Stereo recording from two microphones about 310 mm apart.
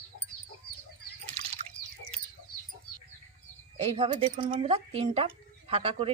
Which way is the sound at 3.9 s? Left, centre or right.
Centre.